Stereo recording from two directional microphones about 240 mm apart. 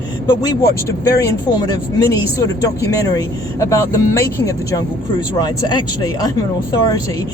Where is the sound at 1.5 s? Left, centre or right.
Centre.